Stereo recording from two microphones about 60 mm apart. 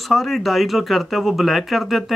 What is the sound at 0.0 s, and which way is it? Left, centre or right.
Speech, centre.